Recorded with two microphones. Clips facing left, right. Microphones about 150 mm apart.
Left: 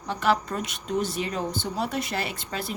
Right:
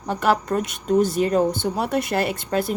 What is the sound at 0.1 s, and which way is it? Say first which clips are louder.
Speech: right 4 dB; 50° right (ahead or behind).